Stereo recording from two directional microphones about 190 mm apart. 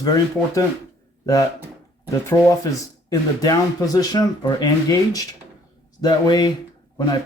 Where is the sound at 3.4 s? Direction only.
20° left (ahead or behind).